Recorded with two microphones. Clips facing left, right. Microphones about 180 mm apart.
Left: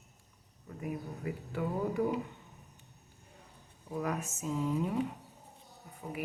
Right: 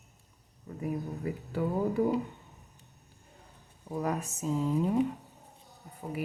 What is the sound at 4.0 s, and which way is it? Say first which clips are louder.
Speech: right 3 dB; 35° right (ahead or behind).